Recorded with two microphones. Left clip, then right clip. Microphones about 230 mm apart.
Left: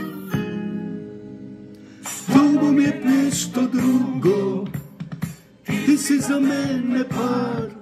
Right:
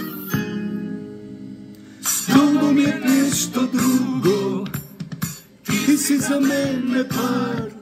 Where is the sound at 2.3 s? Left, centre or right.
Centre.